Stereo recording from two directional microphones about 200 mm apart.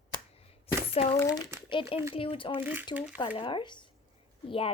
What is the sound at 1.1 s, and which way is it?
Speech, 15° left (ahead or behind).